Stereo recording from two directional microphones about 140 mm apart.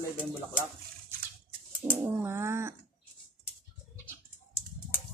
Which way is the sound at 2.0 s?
20° right (ahead or behind).